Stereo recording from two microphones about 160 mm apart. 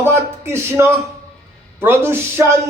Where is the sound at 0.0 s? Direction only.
15° right (ahead or behind).